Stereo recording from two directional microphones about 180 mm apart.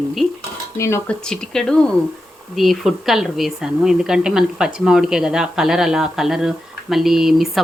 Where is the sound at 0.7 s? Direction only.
15° left (ahead or behind).